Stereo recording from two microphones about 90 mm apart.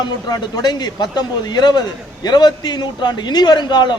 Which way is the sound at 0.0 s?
50° left (ahead or behind).